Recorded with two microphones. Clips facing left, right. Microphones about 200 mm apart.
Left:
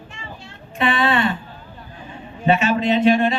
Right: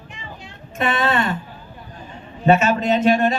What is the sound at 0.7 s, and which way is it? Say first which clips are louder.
Speech: left 1 dB; 45° right (ahead or behind).